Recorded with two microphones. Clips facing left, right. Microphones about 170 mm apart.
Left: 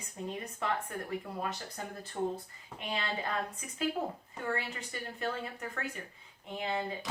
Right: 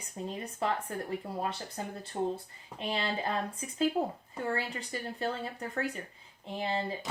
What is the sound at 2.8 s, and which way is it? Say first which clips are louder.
A woman's voice: right 3 dB; 30° right (ahead or behind).